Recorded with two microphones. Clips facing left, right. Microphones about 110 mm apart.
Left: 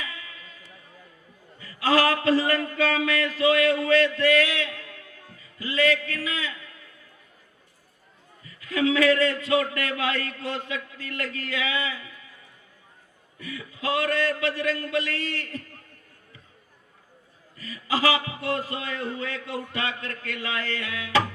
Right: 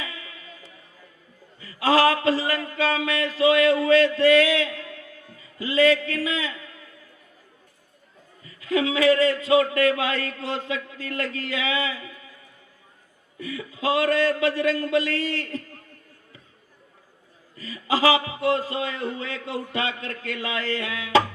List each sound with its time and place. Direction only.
1.6 s a man's voice: 25° right (ahead or behind)
8.4 s a sound: 25° right (ahead or behind)
9.4 s a man's voice: 25° right (ahead or behind)
13.4 s a man's voice: 25° right (ahead or behind)
17.6 s a man's voice: 30° right (ahead or behind)